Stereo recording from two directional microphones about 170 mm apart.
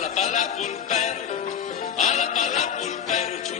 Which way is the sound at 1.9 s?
45° left (ahead or behind).